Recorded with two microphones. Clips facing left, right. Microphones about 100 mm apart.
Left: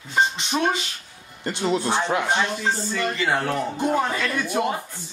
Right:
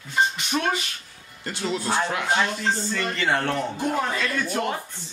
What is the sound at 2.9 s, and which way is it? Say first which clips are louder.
Speech: left 1 dB; 5° left (ahead or behind).